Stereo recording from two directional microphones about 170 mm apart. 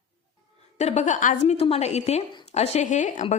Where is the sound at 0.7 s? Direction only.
40° left (ahead or behind).